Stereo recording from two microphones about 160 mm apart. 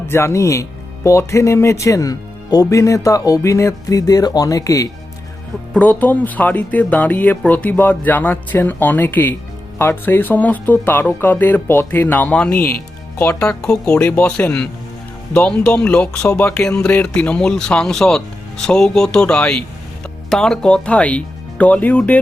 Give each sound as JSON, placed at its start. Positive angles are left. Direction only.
{"t": 0.1, "sound": "speech", "side_deg": 15}
{"t": 5.7, "sound": "speech", "side_deg": 10}